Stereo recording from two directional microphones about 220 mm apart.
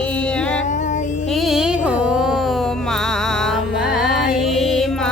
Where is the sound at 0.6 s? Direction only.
35° left (ahead or behind).